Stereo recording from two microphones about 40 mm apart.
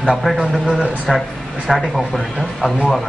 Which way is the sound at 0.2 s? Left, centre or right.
Centre.